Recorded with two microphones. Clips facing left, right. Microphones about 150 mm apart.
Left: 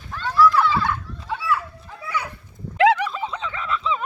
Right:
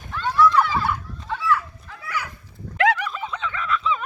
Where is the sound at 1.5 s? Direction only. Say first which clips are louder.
Even; 25° left (ahead or behind).